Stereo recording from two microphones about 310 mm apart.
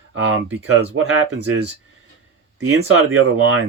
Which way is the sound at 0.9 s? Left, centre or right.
Right.